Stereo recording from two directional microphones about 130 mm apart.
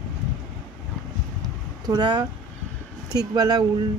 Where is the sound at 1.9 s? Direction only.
35° right (ahead or behind).